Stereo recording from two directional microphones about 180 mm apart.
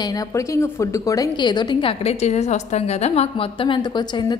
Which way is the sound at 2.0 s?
35° left (ahead or behind).